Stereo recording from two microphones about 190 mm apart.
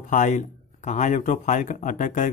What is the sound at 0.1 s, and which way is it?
Speech, 40° left (ahead or behind).